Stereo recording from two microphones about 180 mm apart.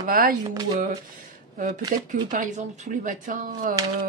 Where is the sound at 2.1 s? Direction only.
45° right (ahead or behind).